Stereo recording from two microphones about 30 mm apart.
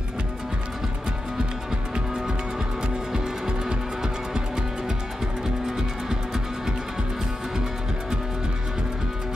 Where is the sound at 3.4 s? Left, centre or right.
Right.